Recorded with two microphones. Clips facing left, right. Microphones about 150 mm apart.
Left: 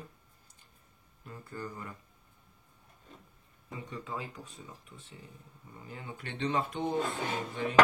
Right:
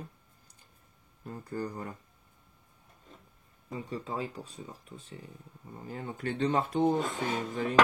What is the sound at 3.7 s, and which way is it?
Speech, 40° right (ahead or behind).